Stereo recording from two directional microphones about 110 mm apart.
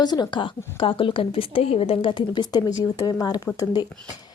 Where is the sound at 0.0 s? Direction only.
40° left (ahead or behind).